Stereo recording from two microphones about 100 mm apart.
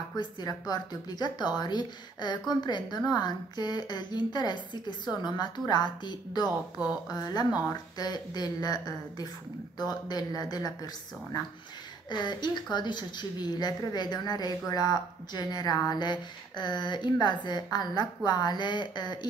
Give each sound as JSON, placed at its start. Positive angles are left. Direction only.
{"t": 0.1, "sound": "a woman's voice", "side_deg": 45}
{"t": 12.1, "sound": "a woman's voice", "side_deg": 50}